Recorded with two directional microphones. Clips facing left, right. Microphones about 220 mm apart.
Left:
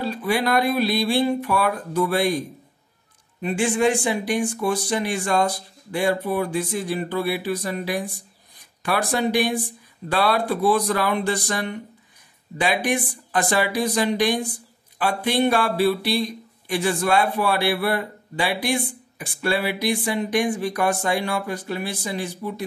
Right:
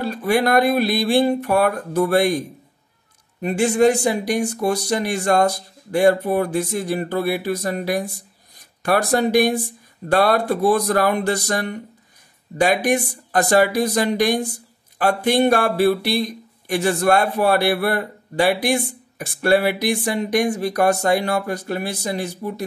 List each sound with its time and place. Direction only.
0.0 s speech: 45° right (ahead or behind)
3.4 s speech: 40° right (ahead or behind)